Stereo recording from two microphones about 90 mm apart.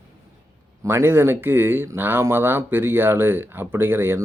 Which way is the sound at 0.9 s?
25° right (ahead or behind).